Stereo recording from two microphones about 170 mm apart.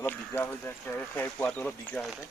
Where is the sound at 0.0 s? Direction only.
10° left (ahead or behind).